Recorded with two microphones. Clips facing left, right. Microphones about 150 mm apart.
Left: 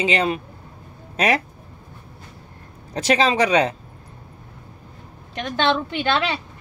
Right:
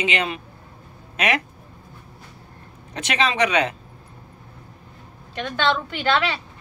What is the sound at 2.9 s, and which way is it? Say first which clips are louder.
Speech: left 5 dB; 35° left (ahead or behind).